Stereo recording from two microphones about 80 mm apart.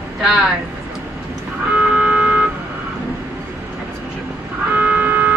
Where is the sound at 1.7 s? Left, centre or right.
Centre.